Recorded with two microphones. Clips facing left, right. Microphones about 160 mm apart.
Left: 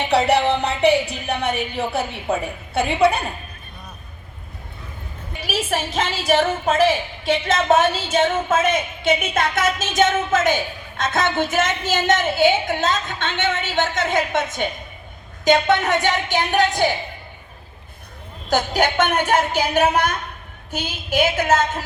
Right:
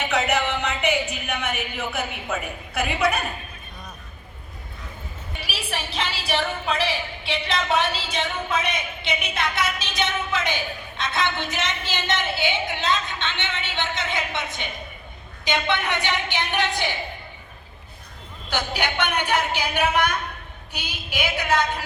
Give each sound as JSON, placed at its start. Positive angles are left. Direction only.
{"t": 0.0, "sound": "a sound", "side_deg": 35}
{"t": 5.4, "sound": "a woman's voice", "side_deg": 45}
{"t": 18.4, "sound": "a woman's voice", "side_deg": 45}